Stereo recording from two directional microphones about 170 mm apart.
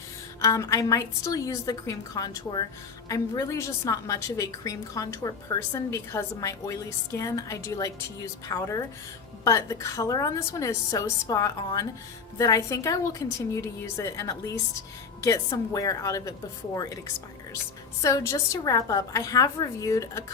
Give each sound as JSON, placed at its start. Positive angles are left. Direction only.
{"t": 0.4, "sound": "a woman's voice", "side_deg": 20}
{"t": 18.0, "sound": "a woman's voice", "side_deg": 20}